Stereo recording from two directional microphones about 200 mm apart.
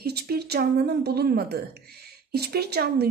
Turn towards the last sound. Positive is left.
turn(degrees=-55)  # may be behind; listen again after turning